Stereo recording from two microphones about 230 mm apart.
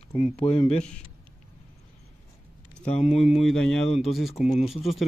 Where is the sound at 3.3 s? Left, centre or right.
Centre.